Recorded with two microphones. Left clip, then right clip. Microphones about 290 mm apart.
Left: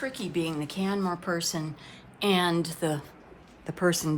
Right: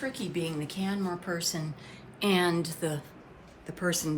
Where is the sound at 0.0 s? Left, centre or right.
Centre.